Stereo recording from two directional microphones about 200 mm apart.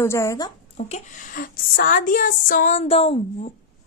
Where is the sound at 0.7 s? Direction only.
40° left (ahead or behind).